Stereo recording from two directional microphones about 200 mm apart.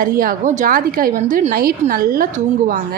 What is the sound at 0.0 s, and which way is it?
A woman's voice, 45° right (ahead or behind).